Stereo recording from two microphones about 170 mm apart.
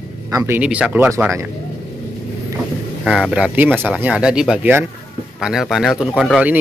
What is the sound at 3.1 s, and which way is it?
Speech, 5° right (ahead or behind).